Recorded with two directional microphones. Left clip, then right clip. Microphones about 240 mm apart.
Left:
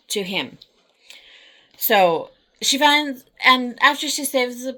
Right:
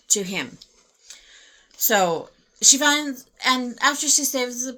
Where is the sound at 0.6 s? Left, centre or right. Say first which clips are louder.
Left 1 dB; right.